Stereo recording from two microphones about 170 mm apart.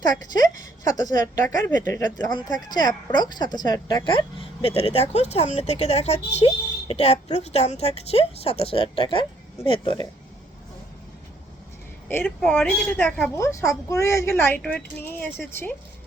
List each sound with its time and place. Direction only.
0.0 s speech: 20° left (ahead or behind)
12.0 s a woman's voice: 10° left (ahead or behind)
13.3 s a woman's voice: 15° left (ahead or behind)